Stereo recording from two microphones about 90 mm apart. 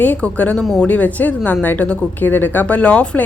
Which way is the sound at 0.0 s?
20° left (ahead or behind).